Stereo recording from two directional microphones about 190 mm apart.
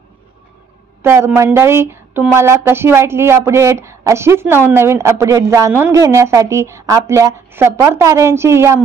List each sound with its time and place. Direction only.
1.0 s a woman's voice: 15° right (ahead or behind)